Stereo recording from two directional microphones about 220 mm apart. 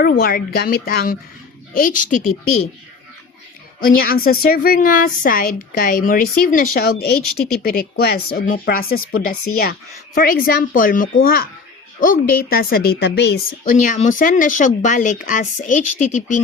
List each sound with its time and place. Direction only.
0.2 s a woman's voice: 40° left (ahead or behind)
3.8 s a woman's voice: 40° left (ahead or behind)
10.2 s a woman's voice: 40° left (ahead or behind)